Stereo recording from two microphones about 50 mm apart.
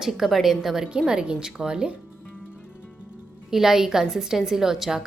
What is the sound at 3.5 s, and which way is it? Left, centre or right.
A woman's voice, centre.